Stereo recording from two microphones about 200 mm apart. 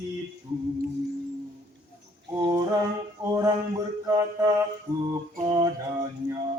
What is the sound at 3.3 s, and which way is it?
Speech, 20° right (ahead or behind).